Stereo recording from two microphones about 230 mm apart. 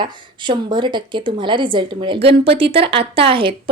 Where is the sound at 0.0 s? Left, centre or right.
Centre.